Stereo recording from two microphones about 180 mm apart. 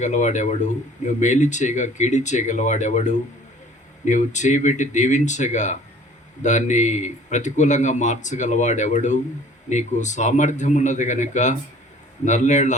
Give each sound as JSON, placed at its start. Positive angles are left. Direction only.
{"t": 0.0, "sound": "speech", "side_deg": 40}